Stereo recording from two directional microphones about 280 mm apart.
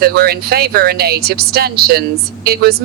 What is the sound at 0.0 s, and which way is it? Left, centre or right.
Speech, right.